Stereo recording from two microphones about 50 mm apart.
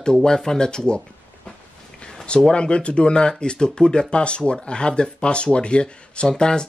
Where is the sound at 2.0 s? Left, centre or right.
Centre.